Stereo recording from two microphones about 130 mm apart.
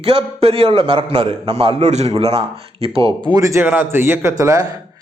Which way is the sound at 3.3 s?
25° right (ahead or behind).